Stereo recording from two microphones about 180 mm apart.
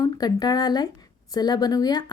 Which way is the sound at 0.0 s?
20° left (ahead or behind).